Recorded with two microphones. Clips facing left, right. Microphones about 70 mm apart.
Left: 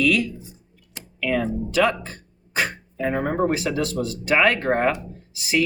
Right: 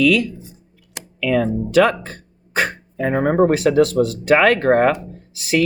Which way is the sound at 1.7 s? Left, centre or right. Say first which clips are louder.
Right 6 dB; right.